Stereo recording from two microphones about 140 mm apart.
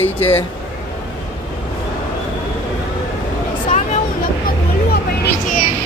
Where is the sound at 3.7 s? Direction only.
60° left (ahead or behind).